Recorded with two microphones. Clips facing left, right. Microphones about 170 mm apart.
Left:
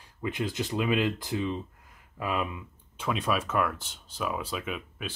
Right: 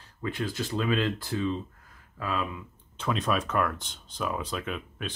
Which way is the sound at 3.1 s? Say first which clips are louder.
Right 1 dB; 5° left (ahead or behind).